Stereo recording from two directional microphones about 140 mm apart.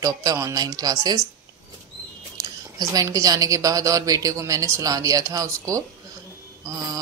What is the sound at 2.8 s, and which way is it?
Speech, 25° right (ahead or behind).